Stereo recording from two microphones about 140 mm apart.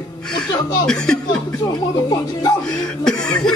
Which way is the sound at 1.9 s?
30° left (ahead or behind).